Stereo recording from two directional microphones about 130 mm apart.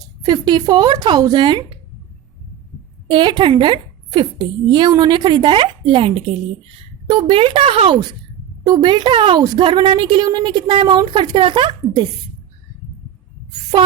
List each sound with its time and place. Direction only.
0.3 s a woman's voice: 30° right (ahead or behind)
3.1 s a woman's voice: 40° right (ahead or behind)